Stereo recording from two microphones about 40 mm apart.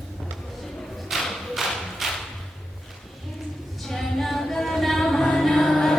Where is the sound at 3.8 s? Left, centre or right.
Centre.